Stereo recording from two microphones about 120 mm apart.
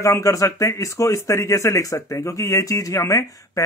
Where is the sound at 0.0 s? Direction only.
25° left (ahead or behind).